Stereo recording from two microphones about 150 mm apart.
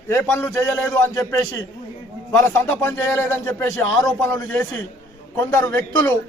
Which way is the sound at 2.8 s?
20° left (ahead or behind).